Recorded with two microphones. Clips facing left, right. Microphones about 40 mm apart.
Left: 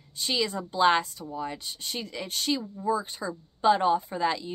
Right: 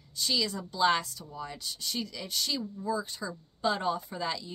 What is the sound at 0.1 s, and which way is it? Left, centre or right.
A woman's voice, left.